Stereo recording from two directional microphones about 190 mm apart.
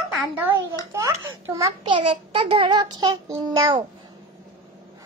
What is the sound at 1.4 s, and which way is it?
A child's voice, 20° right (ahead or behind).